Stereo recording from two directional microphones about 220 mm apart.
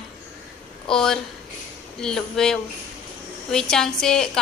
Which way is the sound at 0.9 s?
5° left (ahead or behind).